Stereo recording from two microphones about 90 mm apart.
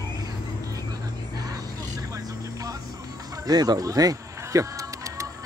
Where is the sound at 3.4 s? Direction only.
45° right (ahead or behind).